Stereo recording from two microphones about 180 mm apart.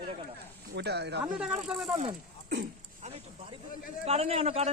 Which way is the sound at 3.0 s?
30° right (ahead or behind).